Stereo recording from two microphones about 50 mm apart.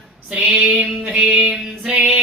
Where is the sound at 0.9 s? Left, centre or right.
Centre.